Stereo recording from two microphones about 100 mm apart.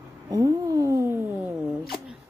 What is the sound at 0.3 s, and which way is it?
Cat, 35° right (ahead or behind).